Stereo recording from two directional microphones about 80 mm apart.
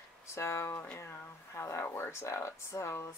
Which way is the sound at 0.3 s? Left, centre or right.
Left.